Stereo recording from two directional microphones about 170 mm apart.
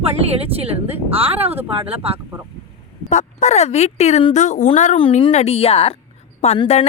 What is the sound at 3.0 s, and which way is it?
A woman's voice, 40° left (ahead or behind).